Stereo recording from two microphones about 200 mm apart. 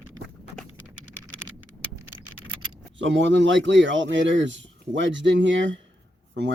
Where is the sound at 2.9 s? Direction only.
65° right (ahead or behind).